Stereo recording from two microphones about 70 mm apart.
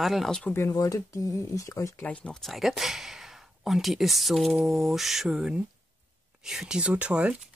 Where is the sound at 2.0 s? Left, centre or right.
Centre.